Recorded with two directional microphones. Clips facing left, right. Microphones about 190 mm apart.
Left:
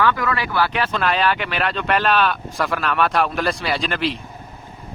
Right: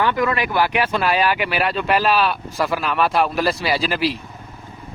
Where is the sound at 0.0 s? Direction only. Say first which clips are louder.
Right 1 dB; 20° right (ahead or behind); by 4.2 s 5° right (ahead or behind).